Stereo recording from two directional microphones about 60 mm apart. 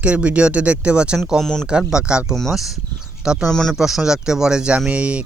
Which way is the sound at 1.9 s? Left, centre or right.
Centre.